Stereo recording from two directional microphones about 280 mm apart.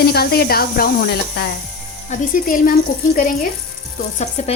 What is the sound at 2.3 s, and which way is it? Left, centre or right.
Speech, left.